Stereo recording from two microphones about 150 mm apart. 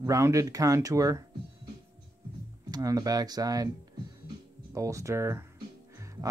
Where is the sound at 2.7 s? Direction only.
25° right (ahead or behind).